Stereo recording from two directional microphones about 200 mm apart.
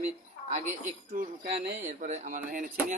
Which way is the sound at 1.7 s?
35° right (ahead or behind).